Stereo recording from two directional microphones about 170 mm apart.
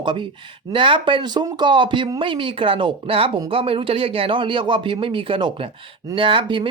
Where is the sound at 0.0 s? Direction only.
30° right (ahead or behind).